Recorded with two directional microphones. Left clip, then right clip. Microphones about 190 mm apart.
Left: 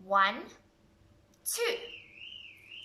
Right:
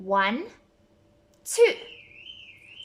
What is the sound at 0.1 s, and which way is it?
Speech, 35° right (ahead or behind).